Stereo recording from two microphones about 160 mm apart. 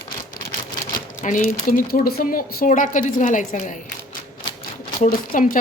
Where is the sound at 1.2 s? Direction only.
50° left (ahead or behind).